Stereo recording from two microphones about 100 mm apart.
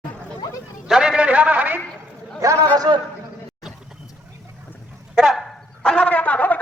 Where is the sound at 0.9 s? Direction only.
5° right (ahead or behind).